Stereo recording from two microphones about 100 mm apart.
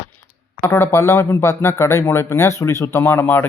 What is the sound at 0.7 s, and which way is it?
Speech, 25° left (ahead or behind).